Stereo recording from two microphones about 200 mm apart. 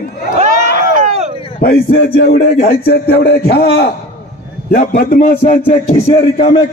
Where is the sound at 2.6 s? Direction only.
50° left (ahead or behind).